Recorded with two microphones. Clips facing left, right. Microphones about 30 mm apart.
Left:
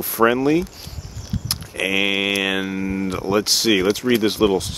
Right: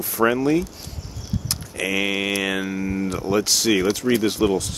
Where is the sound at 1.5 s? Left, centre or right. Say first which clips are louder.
Left 3 dB; left.